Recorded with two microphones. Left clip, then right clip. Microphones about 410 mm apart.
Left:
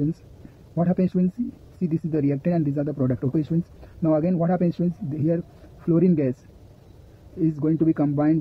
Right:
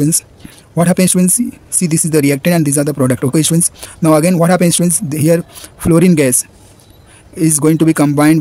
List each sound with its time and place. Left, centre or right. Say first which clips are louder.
0.7 s speech: right 11 dB; left
7.3 s speech: right 11 dB; left